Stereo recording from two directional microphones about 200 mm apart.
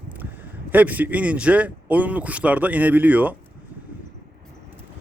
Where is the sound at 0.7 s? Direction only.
10° right (ahead or behind).